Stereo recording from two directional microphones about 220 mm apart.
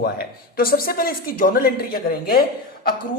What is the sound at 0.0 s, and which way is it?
Speech, 40° left (ahead or behind).